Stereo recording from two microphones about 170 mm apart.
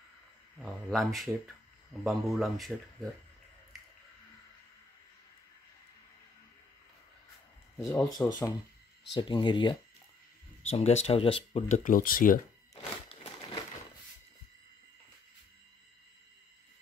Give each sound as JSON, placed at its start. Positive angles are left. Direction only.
{"t": 0.6, "sound": "speech", "side_deg": 0}
{"t": 7.7, "sound": "speech", "side_deg": 15}
{"t": 9.1, "sound": "speech", "side_deg": 25}
{"t": 10.7, "sound": "speech", "side_deg": 40}
{"t": 11.8, "sound": "speech", "side_deg": 55}